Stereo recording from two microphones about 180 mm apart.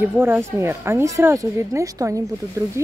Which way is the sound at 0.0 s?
10° right (ahead or behind).